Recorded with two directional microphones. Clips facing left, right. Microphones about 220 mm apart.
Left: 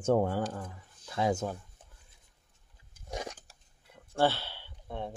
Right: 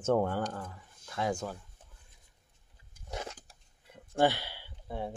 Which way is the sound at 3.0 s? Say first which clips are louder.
Left 2 dB; 15° left (ahead or behind).